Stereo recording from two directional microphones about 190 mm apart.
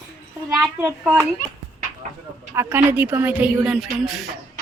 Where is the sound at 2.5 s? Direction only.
10° right (ahead or behind).